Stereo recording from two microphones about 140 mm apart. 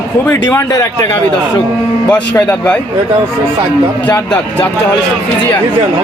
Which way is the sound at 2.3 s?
15° left (ahead or behind).